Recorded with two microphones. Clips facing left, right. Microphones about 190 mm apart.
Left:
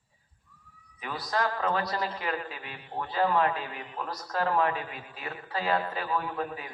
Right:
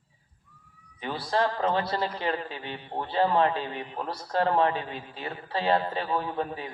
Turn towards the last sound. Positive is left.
turn(degrees=-30)  # may be behind; listen again after turning